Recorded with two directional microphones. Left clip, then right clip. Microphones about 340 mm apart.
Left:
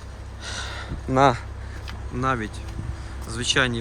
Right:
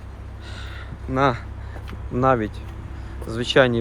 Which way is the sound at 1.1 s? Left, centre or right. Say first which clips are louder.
Left 2 dB; centre.